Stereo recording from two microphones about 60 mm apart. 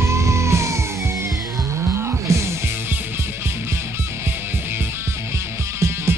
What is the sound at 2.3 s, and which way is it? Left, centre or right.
Music, right.